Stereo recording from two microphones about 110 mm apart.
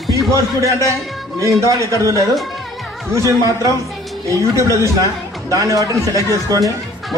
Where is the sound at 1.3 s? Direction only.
30° right (ahead or behind).